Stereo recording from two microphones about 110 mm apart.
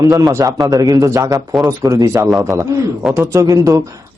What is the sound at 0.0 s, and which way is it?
A man's voice, 35° right (ahead or behind).